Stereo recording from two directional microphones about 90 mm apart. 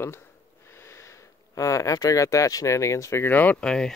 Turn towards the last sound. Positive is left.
turn(degrees=20)  # may be behind; listen again after turning